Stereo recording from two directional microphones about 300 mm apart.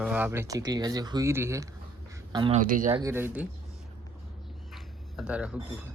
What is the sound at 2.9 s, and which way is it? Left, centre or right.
Speech, centre.